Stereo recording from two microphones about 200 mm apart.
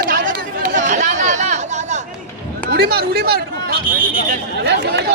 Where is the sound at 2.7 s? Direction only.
50° right (ahead or behind).